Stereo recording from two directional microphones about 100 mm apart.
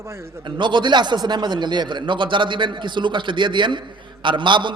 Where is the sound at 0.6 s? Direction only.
50° right (ahead or behind).